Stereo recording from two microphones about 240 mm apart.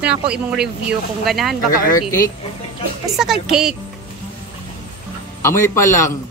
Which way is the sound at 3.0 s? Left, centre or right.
Centre.